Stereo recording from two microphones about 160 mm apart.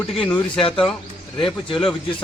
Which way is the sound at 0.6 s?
35° left (ahead or behind).